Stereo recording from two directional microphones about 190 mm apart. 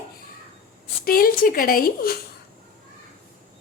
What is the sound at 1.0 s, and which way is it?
Speech, 50° left (ahead or behind).